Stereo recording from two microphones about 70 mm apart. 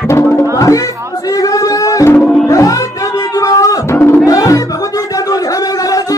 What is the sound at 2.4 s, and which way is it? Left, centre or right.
Music, left.